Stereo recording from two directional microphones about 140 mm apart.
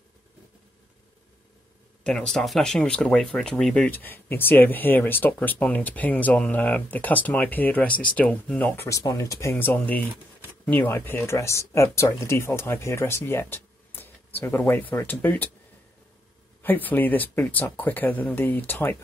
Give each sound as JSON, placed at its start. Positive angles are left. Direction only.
{"t": 2.0, "sound": "speech", "side_deg": 5}
{"t": 16.6, "sound": "speech", "side_deg": 15}